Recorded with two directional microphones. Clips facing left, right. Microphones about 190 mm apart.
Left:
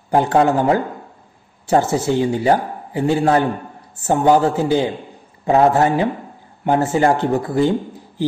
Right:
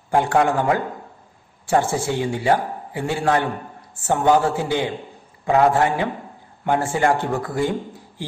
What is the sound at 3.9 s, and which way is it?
A man's voice, 40° left (ahead or behind).